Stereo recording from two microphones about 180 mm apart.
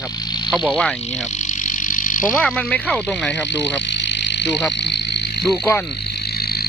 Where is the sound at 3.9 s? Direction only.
75° left (ahead or behind).